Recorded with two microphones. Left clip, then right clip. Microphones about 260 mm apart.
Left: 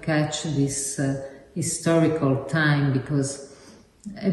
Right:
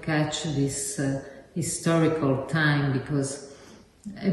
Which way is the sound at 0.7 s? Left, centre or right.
Centre.